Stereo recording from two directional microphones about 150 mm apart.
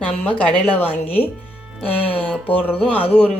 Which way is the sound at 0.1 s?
10° left (ahead or behind).